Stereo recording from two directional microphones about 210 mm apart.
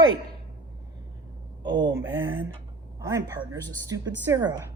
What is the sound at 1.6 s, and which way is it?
Speech, 55° right (ahead or behind).